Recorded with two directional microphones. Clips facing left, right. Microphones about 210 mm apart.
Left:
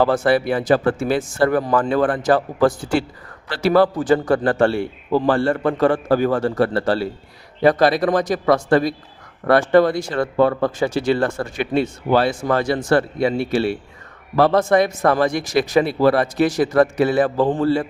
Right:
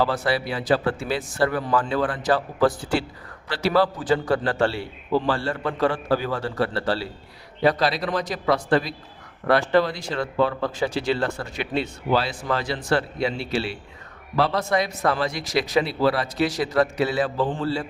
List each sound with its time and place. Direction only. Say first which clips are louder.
0.0 s speech: left 7 dB; 50° left (ahead or behind)